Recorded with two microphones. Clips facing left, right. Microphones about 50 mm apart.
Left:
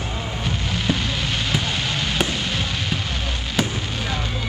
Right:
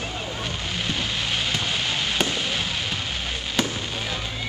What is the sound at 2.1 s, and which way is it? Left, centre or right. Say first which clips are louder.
Fireworks: left 2 dB; centre.